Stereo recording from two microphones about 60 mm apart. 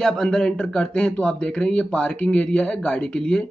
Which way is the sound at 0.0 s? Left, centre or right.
Centre.